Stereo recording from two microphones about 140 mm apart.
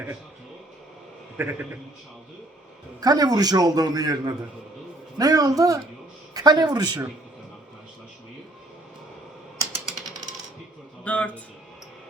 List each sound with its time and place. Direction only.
1.4 s a man's voice: 10° right (ahead or behind)
3.0 s a man's voice: 30° right (ahead or behind)
11.0 s a man's voice: 10° left (ahead or behind)